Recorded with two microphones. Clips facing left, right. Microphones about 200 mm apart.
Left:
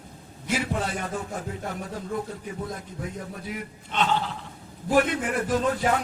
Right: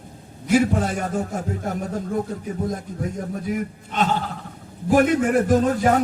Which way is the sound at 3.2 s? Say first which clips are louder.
Right 8 dB; 45° right (ahead or behind).